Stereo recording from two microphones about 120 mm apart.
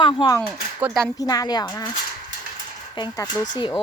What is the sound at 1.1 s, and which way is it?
Speech, 30° left (ahead or behind).